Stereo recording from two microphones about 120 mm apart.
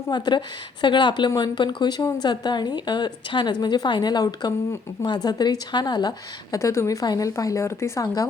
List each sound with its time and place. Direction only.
0.1 s a woman's voice: 40° left (ahead or behind)